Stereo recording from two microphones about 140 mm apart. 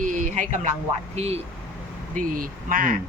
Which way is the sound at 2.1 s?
75° right (ahead or behind).